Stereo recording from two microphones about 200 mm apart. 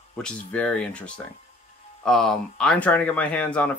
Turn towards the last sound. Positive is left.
turn(degrees=5)  # may be behind; listen again after turning